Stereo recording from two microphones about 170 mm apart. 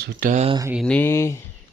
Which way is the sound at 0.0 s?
50° right (ahead or behind).